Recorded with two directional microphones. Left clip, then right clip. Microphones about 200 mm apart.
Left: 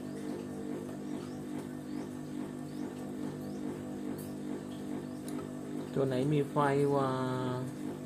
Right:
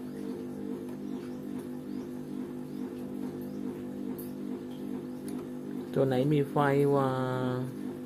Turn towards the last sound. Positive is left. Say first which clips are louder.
# right 3 dB
turn(degrees=-30)  # may be behind; listen again after turning